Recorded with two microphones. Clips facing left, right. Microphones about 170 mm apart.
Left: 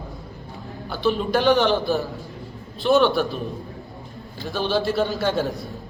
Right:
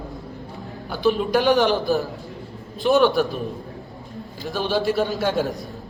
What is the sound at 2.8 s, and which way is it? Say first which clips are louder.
Speech: even; 10° right (ahead or behind).